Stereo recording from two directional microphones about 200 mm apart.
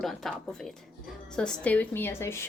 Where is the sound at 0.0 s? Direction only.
Centre (ahead or behind).